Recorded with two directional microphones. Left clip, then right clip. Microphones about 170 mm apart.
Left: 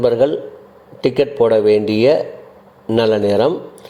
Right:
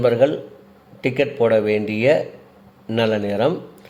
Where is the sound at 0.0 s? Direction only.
15° left (ahead or behind).